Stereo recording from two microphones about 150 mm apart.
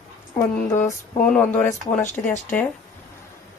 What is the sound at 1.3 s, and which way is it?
Speech, 10° left (ahead or behind).